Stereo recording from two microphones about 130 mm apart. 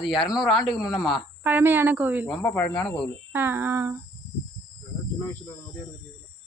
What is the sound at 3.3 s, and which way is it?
Speech, 15° right (ahead or behind).